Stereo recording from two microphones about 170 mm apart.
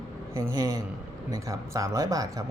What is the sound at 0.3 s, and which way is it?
Speech, 20° right (ahead or behind).